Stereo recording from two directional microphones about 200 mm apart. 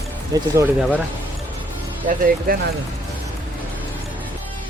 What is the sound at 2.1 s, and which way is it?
Speech, 45° right (ahead or behind).